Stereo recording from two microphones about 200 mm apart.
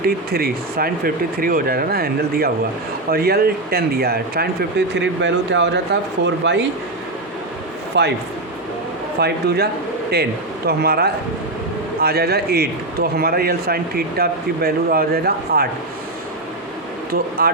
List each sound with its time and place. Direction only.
0.0 s a man's voice: 50° right (ahead or behind)
4.9 s speech: 65° right (ahead or behind)
7.9 s speech: 60° right (ahead or behind)
9.2 s a man's voice: 55° right (ahead or behind)
10.7 s a man's voice: 50° right (ahead or behind)
17.1 s a sound: 50° right (ahead or behind)